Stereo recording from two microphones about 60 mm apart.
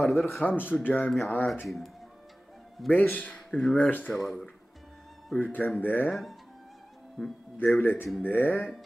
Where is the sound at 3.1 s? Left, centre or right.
Left.